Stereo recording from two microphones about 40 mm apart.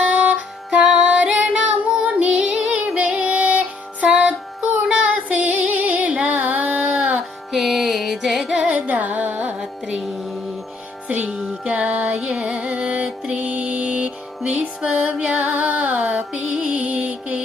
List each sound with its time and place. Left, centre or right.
0.0 s music: right
1.5 s female singing: right
2.1 s music: right
2.7 s music: right
4.9 s female singing: right
6.1 s a sound: right
7.5 s music: centre
8.5 s carnatic music: right
8.9 s carnatic music: right
9.6 s music: centre
11.6 s music: right
15.4 s music: right